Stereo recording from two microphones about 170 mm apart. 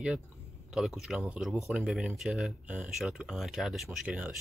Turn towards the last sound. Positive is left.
turn(degrees=-10)  # may be behind; listen again after turning